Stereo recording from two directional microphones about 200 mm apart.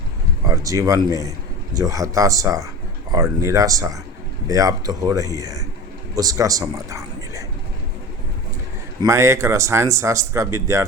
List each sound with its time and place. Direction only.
0.4 s a man's voice: 15° right (ahead or behind)
9.0 s speech: 15° right (ahead or behind)